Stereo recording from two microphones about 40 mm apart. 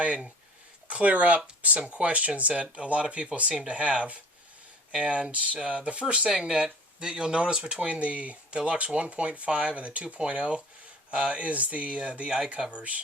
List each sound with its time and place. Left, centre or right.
0.9 s speech: right
7.8 s speech: right